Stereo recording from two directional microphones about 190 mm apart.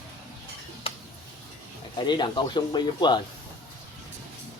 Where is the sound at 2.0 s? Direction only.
25° left (ahead or behind).